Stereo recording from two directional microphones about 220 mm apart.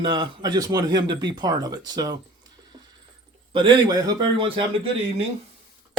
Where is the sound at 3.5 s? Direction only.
20° right (ahead or behind).